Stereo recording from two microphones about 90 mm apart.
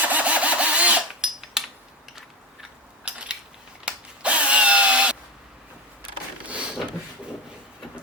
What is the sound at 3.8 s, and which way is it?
Drill, 15° right (ahead or behind).